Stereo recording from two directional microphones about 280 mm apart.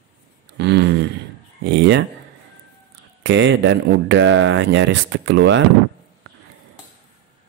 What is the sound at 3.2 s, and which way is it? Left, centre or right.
Speech, right.